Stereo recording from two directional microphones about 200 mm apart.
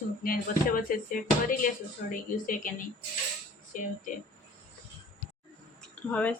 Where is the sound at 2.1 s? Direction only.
40° left (ahead or behind).